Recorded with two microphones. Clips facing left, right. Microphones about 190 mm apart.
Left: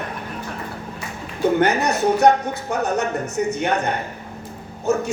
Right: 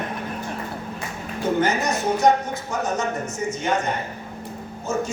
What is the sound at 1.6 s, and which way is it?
A man's voice, 60° left (ahead or behind).